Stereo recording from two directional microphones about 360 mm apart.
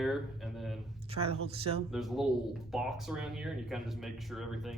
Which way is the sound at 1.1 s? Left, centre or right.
Centre.